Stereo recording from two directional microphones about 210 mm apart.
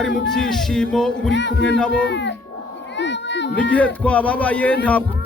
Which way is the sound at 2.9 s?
55° left (ahead or behind).